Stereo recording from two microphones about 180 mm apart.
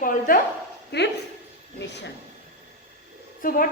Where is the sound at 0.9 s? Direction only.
65° left (ahead or behind).